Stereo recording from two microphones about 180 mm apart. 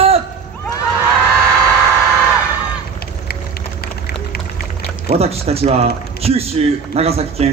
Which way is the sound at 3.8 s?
60° left (ahead or behind).